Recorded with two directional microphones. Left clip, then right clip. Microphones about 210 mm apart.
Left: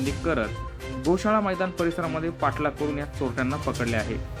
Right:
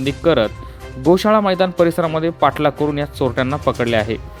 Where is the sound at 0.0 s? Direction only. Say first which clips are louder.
Right 11 dB; 45° right (ahead or behind).